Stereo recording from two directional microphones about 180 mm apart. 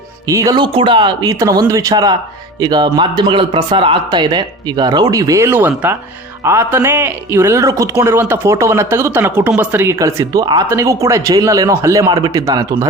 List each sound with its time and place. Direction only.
0.3 s speech: 20° right (ahead or behind)